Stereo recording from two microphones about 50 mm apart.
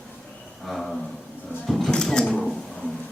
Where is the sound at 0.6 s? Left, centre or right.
Centre.